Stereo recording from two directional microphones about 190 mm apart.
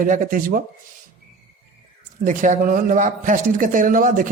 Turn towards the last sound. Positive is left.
turn(degrees=-45)  # may be behind; listen again after turning